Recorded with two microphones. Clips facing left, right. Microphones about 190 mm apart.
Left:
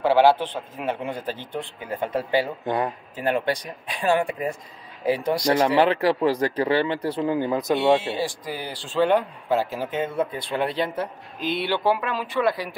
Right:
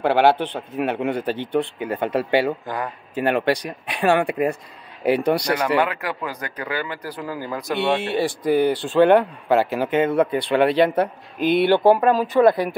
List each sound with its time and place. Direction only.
0.0 s speech: 60° right (ahead or behind)
2.6 s speech: 25° left (ahead or behind)
3.2 s a man's voice: 70° right (ahead or behind)
5.8 s speech: 30° left (ahead or behind)
8.0 s a man's voice: 65° right (ahead or behind)